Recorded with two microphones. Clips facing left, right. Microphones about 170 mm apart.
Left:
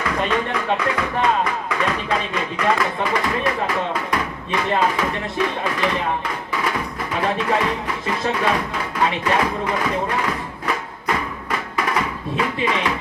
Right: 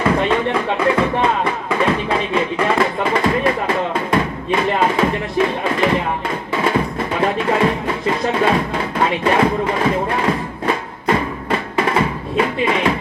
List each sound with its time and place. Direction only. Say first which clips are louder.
0.0 s music: right 5 dB; 30° right (ahead or behind)